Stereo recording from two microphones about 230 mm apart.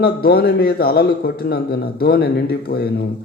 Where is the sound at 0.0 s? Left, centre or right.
Left.